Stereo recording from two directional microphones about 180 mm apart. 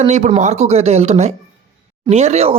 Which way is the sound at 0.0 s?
40° right (ahead or behind).